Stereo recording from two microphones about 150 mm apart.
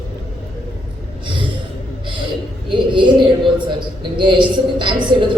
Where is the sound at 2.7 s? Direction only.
35° right (ahead or behind).